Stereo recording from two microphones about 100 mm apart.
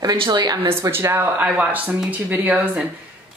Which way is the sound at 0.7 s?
25° right (ahead or behind).